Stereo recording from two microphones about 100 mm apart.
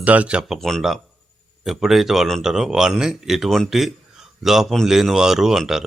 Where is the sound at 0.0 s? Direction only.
15° right (ahead or behind).